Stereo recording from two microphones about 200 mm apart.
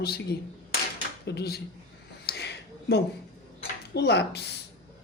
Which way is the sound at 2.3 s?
55° left (ahead or behind).